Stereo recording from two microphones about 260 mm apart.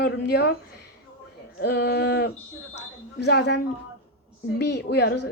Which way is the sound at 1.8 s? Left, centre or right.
Left.